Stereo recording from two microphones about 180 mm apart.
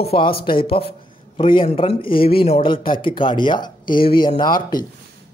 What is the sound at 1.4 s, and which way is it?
Speech, 30° left (ahead or behind).